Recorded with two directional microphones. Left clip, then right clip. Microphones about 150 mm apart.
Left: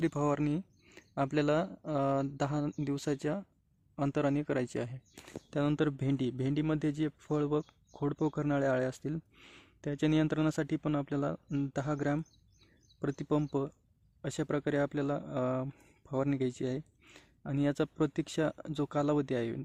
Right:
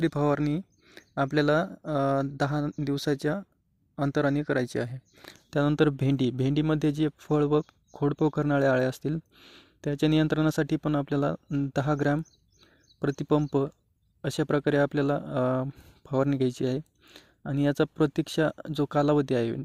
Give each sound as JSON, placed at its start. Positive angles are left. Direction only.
{"t": 0.0, "sound": "speech", "side_deg": -25}
{"t": 9.4, "sound": "a sound", "side_deg": -20}
{"t": 9.9, "sound": "speech", "side_deg": -30}